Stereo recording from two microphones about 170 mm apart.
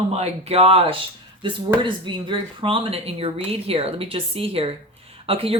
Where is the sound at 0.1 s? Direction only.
35° right (ahead or behind).